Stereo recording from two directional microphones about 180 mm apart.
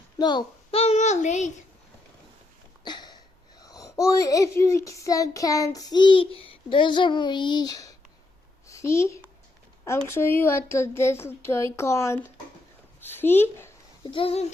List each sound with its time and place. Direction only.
0.2 s a child's voice: 25° left (ahead or behind); by 1.5 s 40° left (ahead or behind)
2.8 s a sound: 25° left (ahead or behind)
3.6 s a child's voice: 20° left (ahead or behind)
8.6 s a sound: 15° left (ahead or behind)
10.1 s speech: 15° left (ahead or behind)
14.1 s a child's voice: 30° left (ahead or behind)